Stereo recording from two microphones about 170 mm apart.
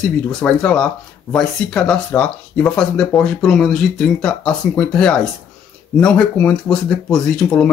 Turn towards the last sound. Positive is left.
turn(degrees=5)  # may be behind; listen again after turning